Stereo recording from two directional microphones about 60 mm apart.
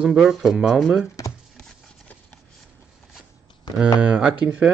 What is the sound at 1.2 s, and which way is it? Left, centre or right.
Chopping, left.